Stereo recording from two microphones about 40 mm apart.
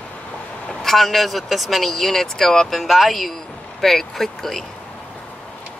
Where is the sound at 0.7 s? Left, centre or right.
Centre.